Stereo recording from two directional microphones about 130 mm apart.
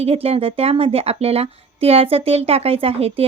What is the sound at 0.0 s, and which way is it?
Speech, 50° right (ahead or behind).